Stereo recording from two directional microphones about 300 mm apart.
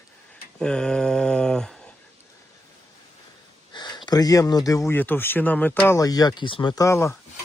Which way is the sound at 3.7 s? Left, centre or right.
Centre.